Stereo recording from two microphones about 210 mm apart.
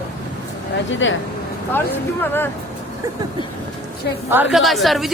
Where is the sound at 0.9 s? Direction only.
65° left (ahead or behind).